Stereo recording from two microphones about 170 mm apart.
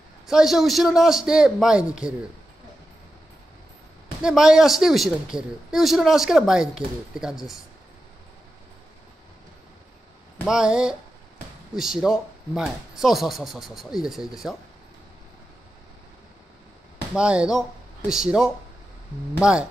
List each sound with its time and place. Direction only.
0.3 s a woman's voice: centre (ahead or behind)
4.2 s a woman's voice: 5° right (ahead or behind)
10.4 s a woman's voice: 5° right (ahead or behind)
17.1 s a woman's voice: 5° right (ahead or behind)